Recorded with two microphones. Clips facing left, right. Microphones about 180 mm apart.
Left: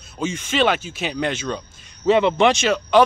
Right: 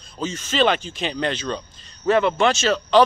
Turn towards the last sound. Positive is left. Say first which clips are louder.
# even
turn(degrees=10)  # may be behind; listen again after turning